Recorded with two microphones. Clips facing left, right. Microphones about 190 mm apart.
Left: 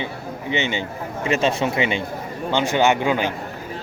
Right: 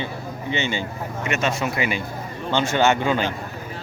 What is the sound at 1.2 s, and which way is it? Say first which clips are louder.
A man's voice: left 4 dB; 30° left (ahead or behind).